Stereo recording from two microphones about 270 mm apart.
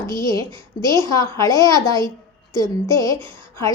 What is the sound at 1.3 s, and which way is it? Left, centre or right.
A woman's voice, centre.